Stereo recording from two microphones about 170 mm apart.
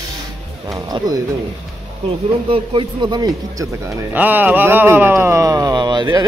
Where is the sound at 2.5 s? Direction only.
30° right (ahead or behind).